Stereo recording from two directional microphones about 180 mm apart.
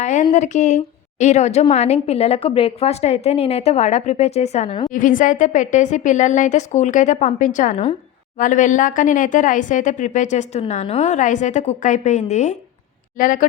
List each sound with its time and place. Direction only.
0.0 s a woman's voice: 40° left (ahead or behind)